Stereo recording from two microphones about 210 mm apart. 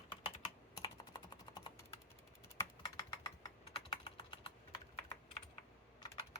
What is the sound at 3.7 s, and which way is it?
Typing, 25° left (ahead or behind).